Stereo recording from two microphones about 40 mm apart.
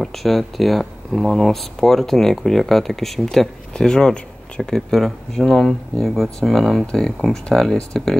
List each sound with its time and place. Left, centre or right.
0.0 s speech: centre
4.7 s speech: centre
6.9 s speech: centre
7.5 s speech: centre